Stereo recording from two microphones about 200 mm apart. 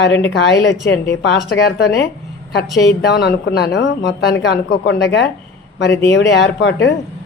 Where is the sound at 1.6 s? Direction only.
55° left (ahead or behind).